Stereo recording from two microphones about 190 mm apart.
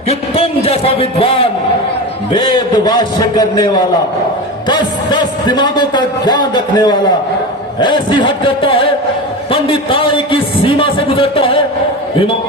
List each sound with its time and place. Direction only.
0.1 s a man's voice: 30° left (ahead or behind)
4.7 s a man's voice: 25° left (ahead or behind)